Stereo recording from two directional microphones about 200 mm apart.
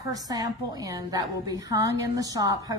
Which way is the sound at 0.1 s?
20° right (ahead or behind).